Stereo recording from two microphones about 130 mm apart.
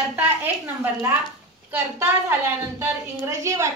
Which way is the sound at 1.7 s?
15° right (ahead or behind).